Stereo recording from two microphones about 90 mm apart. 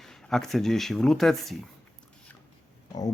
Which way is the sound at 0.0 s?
5° left (ahead or behind).